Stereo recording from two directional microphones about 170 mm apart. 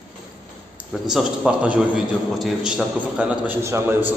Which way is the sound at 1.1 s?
5° right (ahead or behind).